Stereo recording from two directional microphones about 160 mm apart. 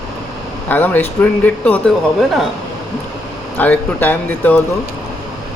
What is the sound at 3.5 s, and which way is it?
Speech, 10° left (ahead or behind).